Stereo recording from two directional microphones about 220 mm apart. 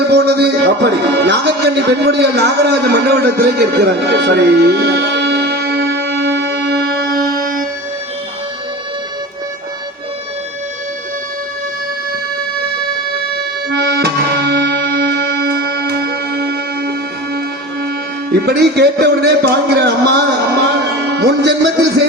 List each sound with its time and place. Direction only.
0.1 s music: 50° right (ahead or behind)
13.7 s music: 50° right (ahead or behind)
18.3 s music: 45° right (ahead or behind)